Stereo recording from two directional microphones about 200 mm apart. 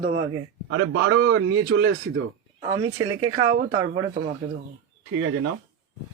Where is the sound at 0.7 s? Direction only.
70° right (ahead or behind).